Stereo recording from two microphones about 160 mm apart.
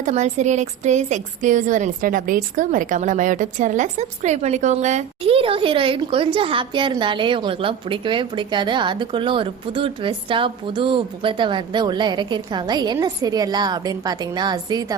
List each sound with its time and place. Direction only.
0.0 s a woman's voice: 45° right (ahead or behind); by 14.9 s 25° right (ahead or behind)